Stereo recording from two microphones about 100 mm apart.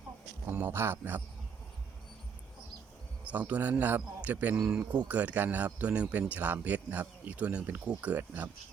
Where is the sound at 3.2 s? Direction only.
15° right (ahead or behind).